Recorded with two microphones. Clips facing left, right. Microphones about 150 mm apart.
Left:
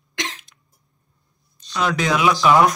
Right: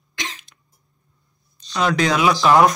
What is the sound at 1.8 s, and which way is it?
Speech, 5° left (ahead or behind).